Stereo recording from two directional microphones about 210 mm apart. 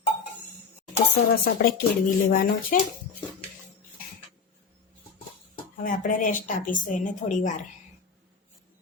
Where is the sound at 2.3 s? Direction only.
40° left (ahead or behind).